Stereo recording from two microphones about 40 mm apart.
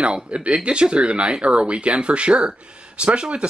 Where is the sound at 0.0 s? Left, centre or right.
Right.